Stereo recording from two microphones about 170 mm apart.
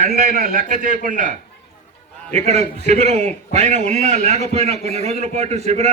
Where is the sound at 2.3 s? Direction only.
40° right (ahead or behind).